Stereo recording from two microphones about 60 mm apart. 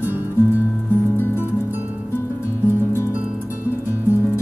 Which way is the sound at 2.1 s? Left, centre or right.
Left.